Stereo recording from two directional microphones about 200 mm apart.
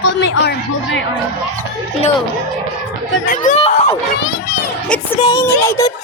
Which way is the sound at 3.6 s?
30° left (ahead or behind).